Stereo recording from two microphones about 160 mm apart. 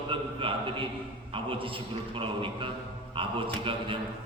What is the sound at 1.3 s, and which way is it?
A man's voice, 35° right (ahead or behind).